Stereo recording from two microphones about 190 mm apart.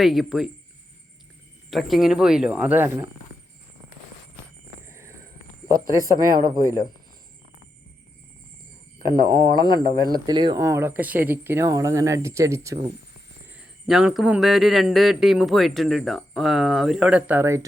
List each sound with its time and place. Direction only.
0.0 s a man's voice: centre (ahead or behind)
1.7 s a man's voice: centre (ahead or behind)
4.9 s a sound: 15° right (ahead or behind)
6.1 s speech: 20° right (ahead or behind)
9.0 s speech: 20° right (ahead or behind)
13.5 s a man's voice: 5° right (ahead or behind)